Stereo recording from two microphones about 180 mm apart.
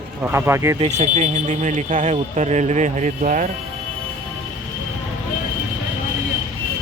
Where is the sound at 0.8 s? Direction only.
40° right (ahead or behind).